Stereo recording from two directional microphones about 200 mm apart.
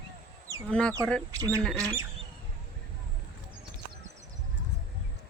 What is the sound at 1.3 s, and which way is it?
Speech, 15° right (ahead or behind).